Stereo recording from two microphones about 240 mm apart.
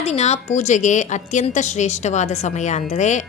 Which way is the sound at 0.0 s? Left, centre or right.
Left.